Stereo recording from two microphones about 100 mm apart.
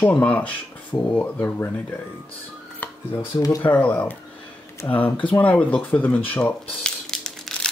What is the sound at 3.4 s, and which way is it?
Speech, 35° left (ahead or behind).